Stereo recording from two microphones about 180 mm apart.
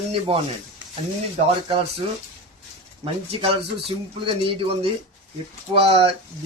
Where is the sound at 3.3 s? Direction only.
30° right (ahead or behind).